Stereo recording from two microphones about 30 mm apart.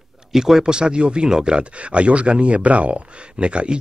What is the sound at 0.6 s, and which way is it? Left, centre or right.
Speech, right.